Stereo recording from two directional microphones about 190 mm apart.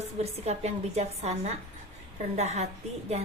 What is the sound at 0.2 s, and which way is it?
A woman's voice, 35° right (ahead or behind).